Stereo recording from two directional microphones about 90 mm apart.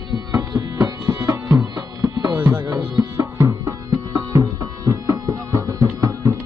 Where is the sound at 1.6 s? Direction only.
45° right (ahead or behind).